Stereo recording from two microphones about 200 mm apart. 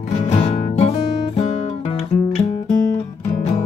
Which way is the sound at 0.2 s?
35° left (ahead or behind).